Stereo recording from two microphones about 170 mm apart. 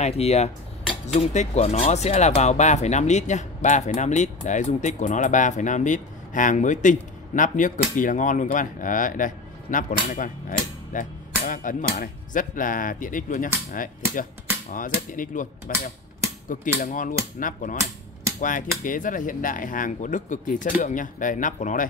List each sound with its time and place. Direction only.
0.0 s a man's voice: 40° left (ahead or behind)
14.7 s a man's voice: 50° left (ahead or behind)